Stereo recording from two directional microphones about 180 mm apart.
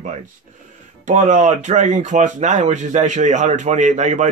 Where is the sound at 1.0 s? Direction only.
45° right (ahead or behind).